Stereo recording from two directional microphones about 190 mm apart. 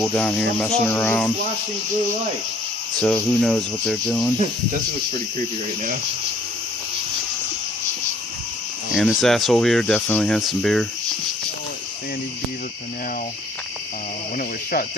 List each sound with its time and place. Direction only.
0.0 s speech: 5° left (ahead or behind)
3.0 s speech: 5° left (ahead or behind)
9.0 s speech: centre (ahead or behind)
14.3 s speech: 50° left (ahead or behind)